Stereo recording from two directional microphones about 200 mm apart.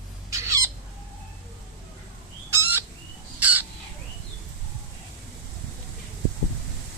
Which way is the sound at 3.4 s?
10° right (ahead or behind).